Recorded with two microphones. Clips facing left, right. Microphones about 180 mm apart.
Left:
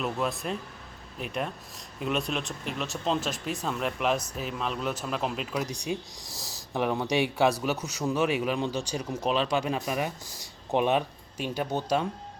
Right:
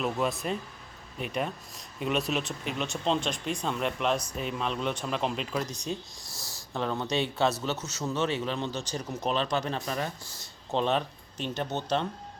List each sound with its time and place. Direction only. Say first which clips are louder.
0.0 s speech: right 1 dB; centre (ahead or behind)
5.8 s speech: left 2 dB; 15° left (ahead or behind)